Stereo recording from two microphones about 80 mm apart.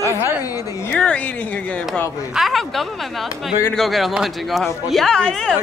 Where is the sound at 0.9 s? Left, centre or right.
Centre.